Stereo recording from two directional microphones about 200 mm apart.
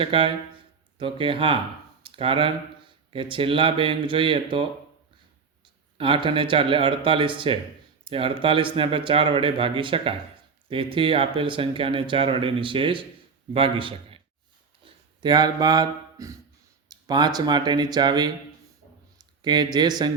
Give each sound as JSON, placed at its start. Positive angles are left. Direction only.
{"t": 0.0, "sound": "speech", "side_deg": -25}
{"t": 6.0, "sound": "speech", "side_deg": -25}
{"t": 19.4, "sound": "speech", "side_deg": -20}